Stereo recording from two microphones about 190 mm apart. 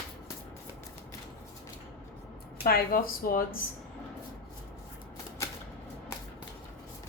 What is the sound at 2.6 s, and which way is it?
Speech, 50° left (ahead or behind).